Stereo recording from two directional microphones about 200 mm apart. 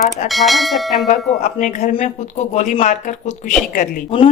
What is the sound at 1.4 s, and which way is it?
Speech, 35° left (ahead or behind).